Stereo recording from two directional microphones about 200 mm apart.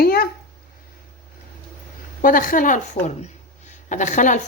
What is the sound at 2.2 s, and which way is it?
Speech, 45° left (ahead or behind).